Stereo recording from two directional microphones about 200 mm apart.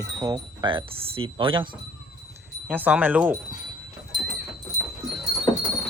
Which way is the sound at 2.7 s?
10° right (ahead or behind).